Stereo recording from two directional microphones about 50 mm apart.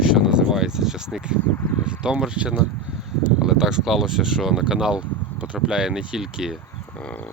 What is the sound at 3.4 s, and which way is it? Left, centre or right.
Speech, centre.